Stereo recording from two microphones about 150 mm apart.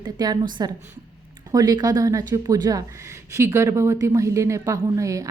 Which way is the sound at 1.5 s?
25° right (ahead or behind).